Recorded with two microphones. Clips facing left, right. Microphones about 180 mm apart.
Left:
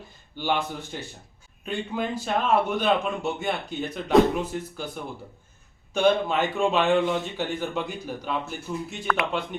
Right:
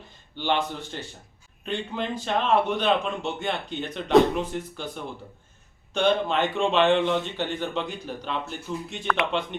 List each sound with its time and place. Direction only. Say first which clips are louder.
0.3 s a man's voice: right 1 dB; 10° left (ahead or behind)